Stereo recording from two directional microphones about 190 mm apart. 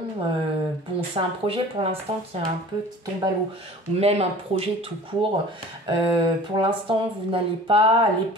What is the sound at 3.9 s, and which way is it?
Speech, 35° right (ahead or behind).